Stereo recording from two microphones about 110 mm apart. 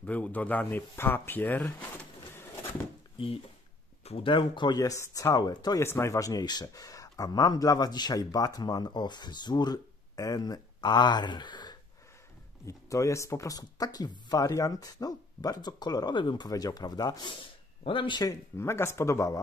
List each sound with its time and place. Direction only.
0.0 s speech: 15° left (ahead or behind)
2.3 s a sound: 20° left (ahead or behind)
3.2 s speech: 55° left (ahead or behind); by 5.8 s 40° left (ahead or behind)
5.8 s speech: 25° left (ahead or behind); by 11.7 s 40° left (ahead or behind)
12.6 s speech: 25° left (ahead or behind); by 18.2 s 50° left (ahead or behind)
18.2 s speech: 30° left (ahead or behind)